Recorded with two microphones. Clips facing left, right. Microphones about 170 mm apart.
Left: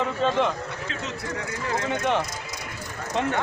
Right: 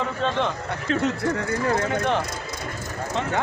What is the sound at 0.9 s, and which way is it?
Speech, 55° right (ahead or behind).